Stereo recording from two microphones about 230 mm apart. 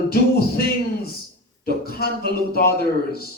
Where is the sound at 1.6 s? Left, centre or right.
Left.